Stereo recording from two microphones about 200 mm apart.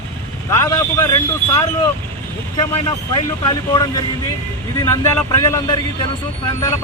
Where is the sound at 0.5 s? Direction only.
15° left (ahead or behind).